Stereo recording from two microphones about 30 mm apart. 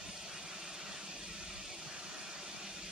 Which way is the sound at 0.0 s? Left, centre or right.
Centre.